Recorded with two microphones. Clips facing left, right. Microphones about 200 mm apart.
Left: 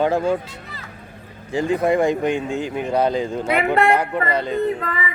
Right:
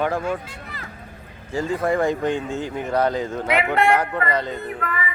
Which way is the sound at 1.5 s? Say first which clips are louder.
Left 3 dB; 15° left (ahead or behind).